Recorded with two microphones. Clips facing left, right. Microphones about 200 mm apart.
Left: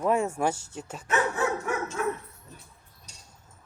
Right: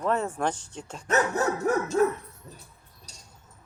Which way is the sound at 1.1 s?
40° right (ahead or behind).